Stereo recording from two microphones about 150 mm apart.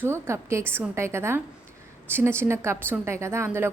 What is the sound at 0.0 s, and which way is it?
A woman's voice, 15° right (ahead or behind).